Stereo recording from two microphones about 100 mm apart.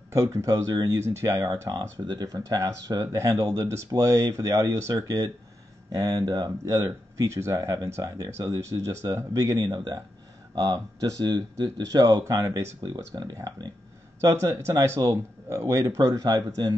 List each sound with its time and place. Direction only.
0.1 s speech: 30° right (ahead or behind)
14.2 s speech: 30° right (ahead or behind)